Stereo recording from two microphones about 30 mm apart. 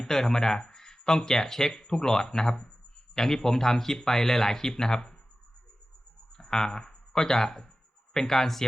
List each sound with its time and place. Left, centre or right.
0.0 s speech: centre
6.3 s speech: centre